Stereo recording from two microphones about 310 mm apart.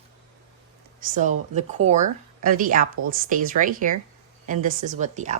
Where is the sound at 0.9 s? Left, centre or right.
Right.